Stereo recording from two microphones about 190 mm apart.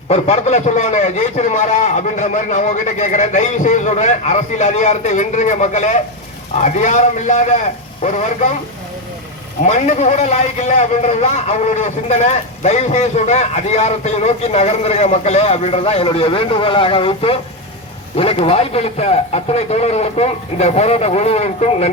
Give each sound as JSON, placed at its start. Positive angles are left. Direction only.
{"t": 0.1, "sound": "a man's voice", "side_deg": 35}
{"t": 9.6, "sound": "a man's voice", "side_deg": 35}